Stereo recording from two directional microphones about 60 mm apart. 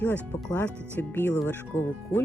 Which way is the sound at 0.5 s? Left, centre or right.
Left.